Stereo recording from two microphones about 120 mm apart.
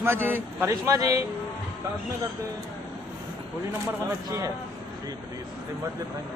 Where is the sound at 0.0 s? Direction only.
25° right (ahead or behind).